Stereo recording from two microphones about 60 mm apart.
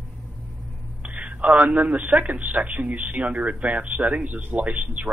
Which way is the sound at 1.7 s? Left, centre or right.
Right.